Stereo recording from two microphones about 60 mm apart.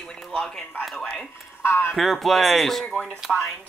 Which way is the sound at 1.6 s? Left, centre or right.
Left.